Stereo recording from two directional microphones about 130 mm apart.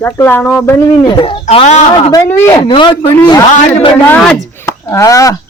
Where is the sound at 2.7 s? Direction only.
35° left (ahead or behind).